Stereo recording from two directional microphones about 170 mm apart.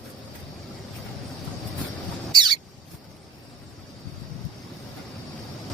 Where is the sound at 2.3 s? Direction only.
25° right (ahead or behind).